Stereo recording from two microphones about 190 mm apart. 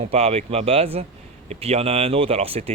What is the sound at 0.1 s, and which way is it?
Speech, 35° right (ahead or behind).